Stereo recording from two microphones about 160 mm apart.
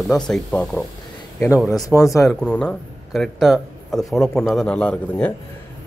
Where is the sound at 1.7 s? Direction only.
20° left (ahead or behind).